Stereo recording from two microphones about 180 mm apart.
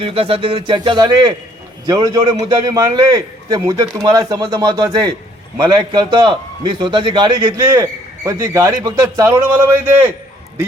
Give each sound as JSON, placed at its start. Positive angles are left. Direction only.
{"t": 0.0, "sound": "a man's voice", "side_deg": -30}
{"t": 7.7, "sound": "a man's voice", "side_deg": -15}